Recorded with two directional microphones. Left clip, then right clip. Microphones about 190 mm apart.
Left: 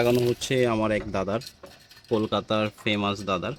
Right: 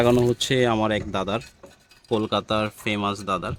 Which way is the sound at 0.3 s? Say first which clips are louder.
Right 3 dB; 25° right (ahead or behind).